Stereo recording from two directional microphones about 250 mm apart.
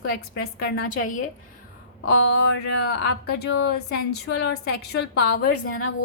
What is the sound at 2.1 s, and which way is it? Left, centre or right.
Speech, left.